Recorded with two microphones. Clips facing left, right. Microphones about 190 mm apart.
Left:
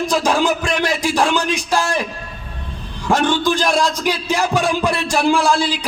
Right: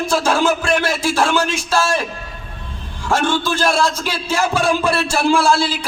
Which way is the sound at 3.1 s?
15° left (ahead or behind).